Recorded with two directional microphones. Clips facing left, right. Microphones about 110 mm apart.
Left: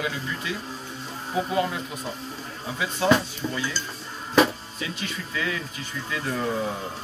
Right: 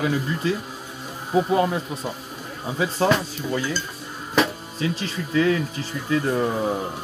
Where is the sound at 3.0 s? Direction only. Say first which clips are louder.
Even; 40° right (ahead or behind).